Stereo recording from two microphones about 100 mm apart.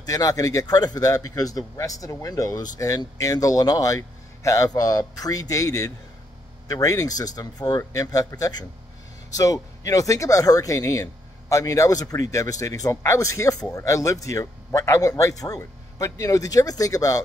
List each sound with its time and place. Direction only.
0.0 s speech: 35° left (ahead or behind)